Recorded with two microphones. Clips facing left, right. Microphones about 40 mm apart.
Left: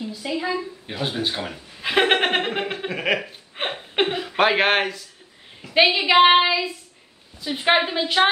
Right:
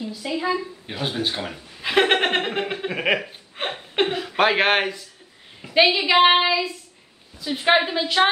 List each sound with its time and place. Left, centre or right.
0.0 s speech: centre
2.9 s speech: centre
3.6 s a woman's voice: centre